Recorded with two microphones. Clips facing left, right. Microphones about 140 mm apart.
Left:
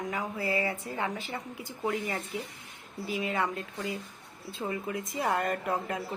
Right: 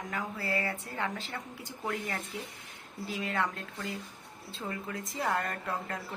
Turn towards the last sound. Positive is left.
turn(degrees=15)  # may be behind; listen again after turning